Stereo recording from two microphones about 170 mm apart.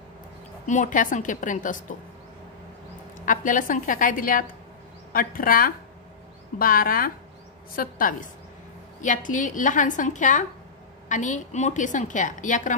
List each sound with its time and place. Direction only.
0.7 s a woman's voice: 50° left (ahead or behind)
3.3 s a woman's voice: 50° left (ahead or behind)